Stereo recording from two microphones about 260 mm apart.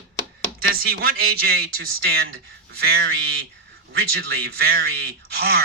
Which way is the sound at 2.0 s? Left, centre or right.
Right.